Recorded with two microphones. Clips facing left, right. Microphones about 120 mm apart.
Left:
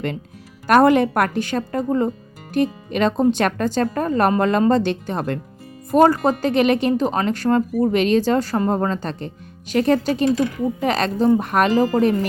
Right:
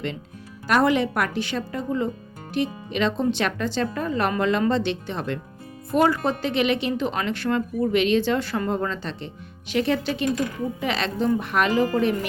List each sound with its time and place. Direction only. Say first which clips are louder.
0.7 s a woman's voice: left 6 dB; 50° left (ahead or behind)